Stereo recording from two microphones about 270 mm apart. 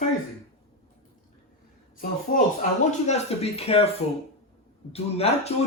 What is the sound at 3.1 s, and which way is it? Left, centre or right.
Speech, left.